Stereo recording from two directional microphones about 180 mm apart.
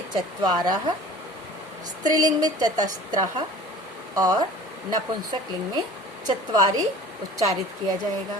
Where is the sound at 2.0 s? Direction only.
20° right (ahead or behind).